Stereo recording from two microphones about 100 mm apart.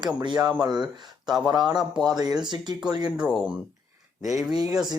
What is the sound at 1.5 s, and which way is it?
Speech, 45° right (ahead or behind).